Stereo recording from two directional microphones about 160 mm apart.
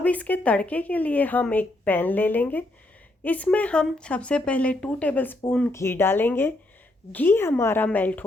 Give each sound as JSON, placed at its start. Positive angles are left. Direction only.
{"t": 0.0, "sound": "speech", "side_deg": 10}